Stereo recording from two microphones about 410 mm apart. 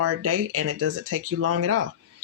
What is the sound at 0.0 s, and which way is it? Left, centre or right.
Speech, right.